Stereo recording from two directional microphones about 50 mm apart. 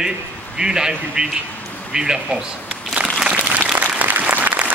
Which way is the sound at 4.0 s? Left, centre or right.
Right.